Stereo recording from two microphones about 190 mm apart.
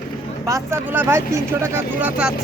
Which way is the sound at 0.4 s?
15° right (ahead or behind).